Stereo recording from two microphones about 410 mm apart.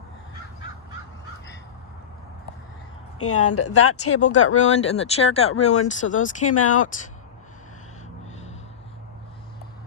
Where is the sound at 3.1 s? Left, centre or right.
Left.